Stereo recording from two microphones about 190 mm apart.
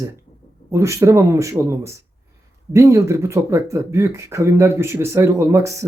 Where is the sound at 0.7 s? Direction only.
15° right (ahead or behind).